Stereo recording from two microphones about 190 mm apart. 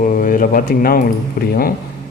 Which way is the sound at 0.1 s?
45° left (ahead or behind).